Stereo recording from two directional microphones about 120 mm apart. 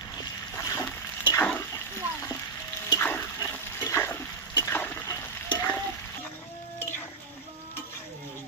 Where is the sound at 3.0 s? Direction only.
20° left (ahead or behind).